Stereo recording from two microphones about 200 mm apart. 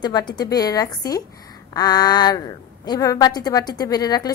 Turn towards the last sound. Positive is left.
turn(degrees=20)  # may be behind; listen again after turning